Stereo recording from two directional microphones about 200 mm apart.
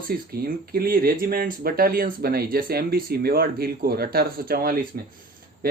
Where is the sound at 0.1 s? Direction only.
50° right (ahead or behind).